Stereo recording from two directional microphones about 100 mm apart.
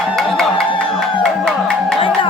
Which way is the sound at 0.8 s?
65° left (ahead or behind).